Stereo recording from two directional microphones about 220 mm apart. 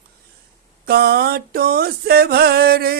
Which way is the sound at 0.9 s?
45° right (ahead or behind).